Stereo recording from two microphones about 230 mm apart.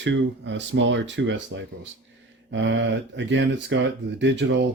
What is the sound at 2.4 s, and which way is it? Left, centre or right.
Speech, right.